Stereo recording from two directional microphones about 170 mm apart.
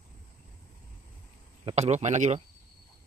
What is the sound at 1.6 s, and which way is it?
Speech, 40° right (ahead or behind).